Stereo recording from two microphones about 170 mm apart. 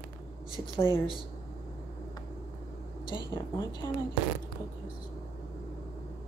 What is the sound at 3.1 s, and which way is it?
Speech, 15° left (ahead or behind).